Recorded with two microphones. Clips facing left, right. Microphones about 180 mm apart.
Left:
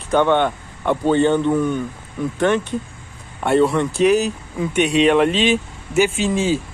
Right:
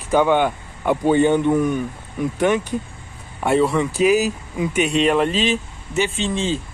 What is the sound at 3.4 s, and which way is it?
Speech, centre (ahead or behind).